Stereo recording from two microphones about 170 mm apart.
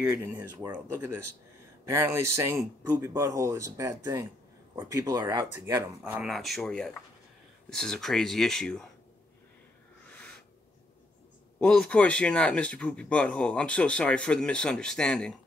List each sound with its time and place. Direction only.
0.0 s speech: 10° right (ahead or behind)
0.6 s speech: 20° right (ahead or behind)
6.2 s speech: centre (ahead or behind)
11.6 s speech: 5° left (ahead or behind)